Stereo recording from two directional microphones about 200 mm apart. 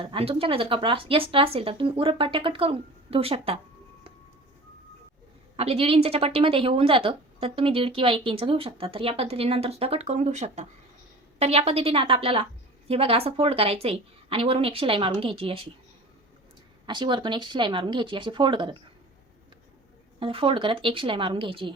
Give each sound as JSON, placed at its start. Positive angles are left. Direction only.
{"t": 0.0, "sound": "a woman's voice", "side_deg": -30}
{"t": 5.5, "sound": "a woman's voice", "side_deg": -30}
{"t": 16.8, "sound": "a woman's voice", "side_deg": -25}
{"t": 20.1, "sound": "a woman's voice", "side_deg": -25}